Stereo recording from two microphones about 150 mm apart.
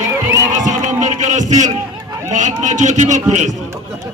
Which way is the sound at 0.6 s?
55° right (ahead or behind).